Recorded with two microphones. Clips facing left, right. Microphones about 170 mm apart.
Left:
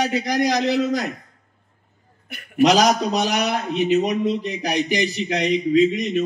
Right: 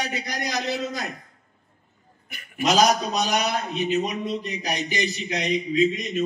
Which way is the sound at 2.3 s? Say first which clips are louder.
Left 6 dB; 65° left (ahead or behind).